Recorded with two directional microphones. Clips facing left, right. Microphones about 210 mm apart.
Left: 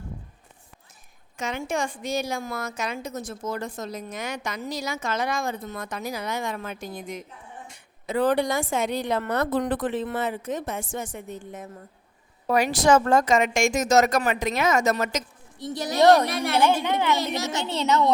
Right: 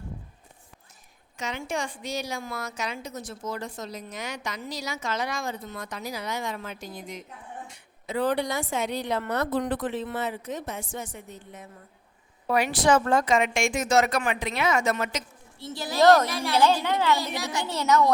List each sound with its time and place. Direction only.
1.4 s a woman's voice: 50° left (ahead or behind)
7.7 s a sound: 50° left (ahead or behind)
8.7 s a woman's voice: 50° left (ahead or behind)
15.5 s speech: 20° left (ahead or behind)